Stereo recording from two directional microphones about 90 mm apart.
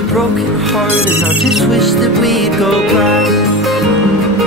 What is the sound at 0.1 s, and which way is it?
Music, centre (ahead or behind).